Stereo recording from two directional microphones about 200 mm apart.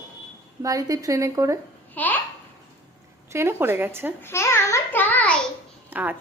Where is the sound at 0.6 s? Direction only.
15° right (ahead or behind).